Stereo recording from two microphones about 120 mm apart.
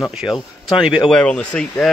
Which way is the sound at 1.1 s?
10° left (ahead or behind).